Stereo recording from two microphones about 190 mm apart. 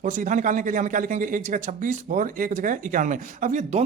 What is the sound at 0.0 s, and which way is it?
Speech, 45° right (ahead or behind).